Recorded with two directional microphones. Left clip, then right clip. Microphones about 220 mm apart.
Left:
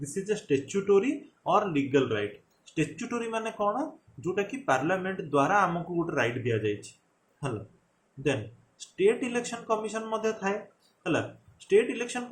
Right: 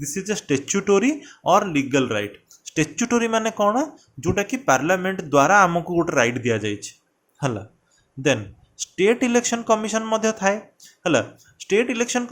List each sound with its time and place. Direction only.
0.0 s speech: 45° right (ahead or behind)
8.8 s speech: 50° right (ahead or behind)